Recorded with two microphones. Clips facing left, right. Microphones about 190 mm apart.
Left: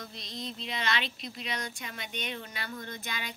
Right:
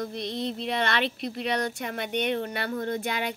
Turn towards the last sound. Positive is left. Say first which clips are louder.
# right 11 dB
turn(degrees=-60)  # may be behind; listen again after turning